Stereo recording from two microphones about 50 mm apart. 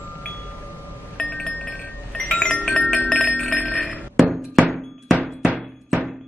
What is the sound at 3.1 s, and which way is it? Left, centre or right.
Wind chime, centre.